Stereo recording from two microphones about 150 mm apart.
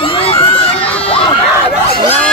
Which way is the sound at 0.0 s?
40° left (ahead or behind).